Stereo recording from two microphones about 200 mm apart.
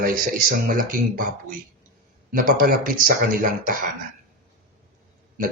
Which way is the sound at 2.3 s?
45° right (ahead or behind).